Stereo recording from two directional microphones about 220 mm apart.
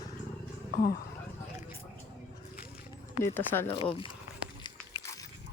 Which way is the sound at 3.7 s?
25° left (ahead or behind).